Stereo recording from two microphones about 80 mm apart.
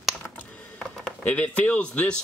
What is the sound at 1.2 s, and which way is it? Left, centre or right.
Speech, centre.